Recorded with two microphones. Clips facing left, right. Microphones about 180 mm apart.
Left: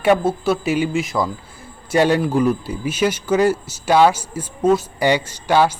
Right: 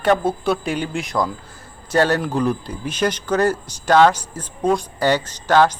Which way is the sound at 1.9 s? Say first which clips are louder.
Left 2 dB; 15° left (ahead or behind).